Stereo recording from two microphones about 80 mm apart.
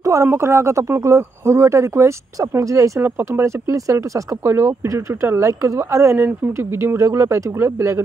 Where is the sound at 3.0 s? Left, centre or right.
Right.